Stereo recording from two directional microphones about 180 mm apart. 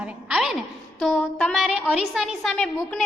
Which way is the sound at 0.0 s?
5° right (ahead or behind).